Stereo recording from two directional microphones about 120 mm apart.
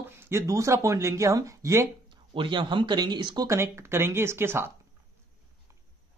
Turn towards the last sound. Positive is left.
turn(degrees=-20)  # may be behind; listen again after turning